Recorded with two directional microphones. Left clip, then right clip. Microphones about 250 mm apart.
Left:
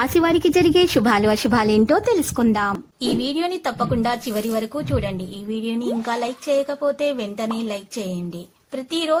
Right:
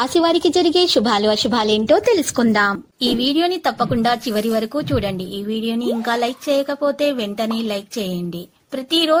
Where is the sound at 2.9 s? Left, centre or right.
Centre.